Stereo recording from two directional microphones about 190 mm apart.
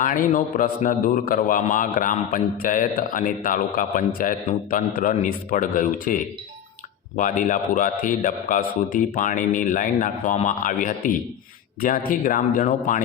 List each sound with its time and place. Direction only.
0.0 s a man's voice: 45° left (ahead or behind)